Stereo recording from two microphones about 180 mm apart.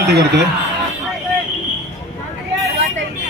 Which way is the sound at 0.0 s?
65° right (ahead or behind).